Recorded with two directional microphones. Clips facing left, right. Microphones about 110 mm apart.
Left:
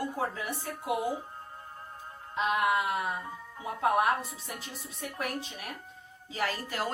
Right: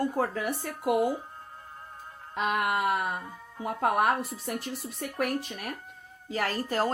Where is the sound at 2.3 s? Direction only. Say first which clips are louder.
Even; 55° right (ahead or behind).